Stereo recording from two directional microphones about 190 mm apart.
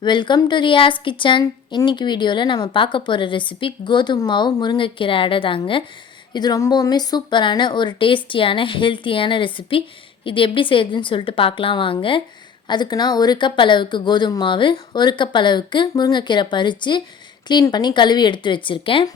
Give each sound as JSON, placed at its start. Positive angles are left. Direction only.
{"t": 0.0, "sound": "a woman's voice", "side_deg": 25}